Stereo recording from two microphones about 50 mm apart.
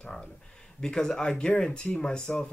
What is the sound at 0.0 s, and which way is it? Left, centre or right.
Speech, centre.